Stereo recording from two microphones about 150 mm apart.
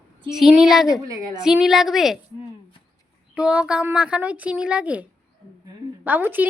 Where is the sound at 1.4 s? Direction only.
5° right (ahead or behind).